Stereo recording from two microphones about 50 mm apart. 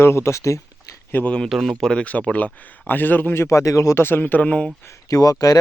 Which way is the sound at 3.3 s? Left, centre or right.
Left.